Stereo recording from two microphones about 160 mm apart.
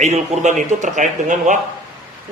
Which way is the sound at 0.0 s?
45° right (ahead or behind).